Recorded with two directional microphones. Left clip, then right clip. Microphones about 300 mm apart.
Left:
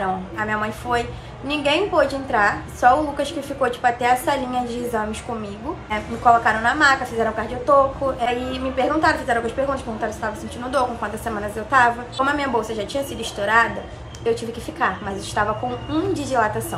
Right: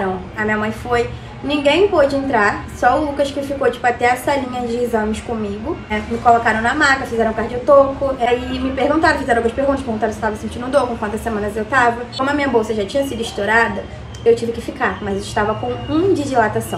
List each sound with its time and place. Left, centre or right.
0.4 s a woman's voice: centre
6.4 s a woman's voice: centre